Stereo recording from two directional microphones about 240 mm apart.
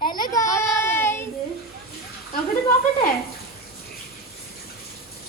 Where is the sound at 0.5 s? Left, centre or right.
Centre.